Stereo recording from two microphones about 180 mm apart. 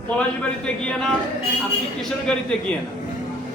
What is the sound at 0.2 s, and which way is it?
Speech, 5° left (ahead or behind).